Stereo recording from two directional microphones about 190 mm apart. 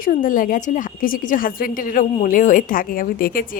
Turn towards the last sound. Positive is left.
turn(degrees=50)  # may be behind; listen again after turning